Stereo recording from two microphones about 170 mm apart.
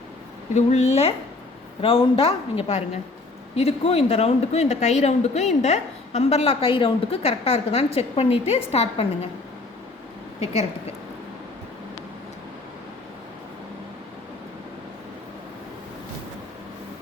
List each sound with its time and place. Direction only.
0.5 s speech: 40° left (ahead or behind)
10.4 s speech: 40° left (ahead or behind)